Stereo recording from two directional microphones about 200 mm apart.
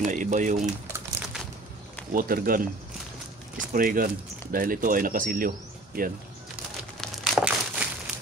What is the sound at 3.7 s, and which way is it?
Speech, 45° right (ahead or behind).